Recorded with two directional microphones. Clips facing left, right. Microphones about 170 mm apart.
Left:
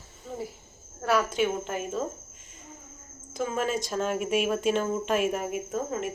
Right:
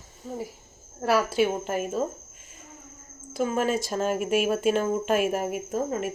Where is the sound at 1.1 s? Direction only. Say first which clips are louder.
Right 2 dB; 5° right (ahead or behind).